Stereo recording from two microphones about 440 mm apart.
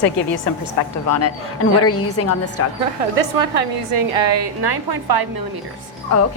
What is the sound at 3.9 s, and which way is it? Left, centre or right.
A woman's voice, right.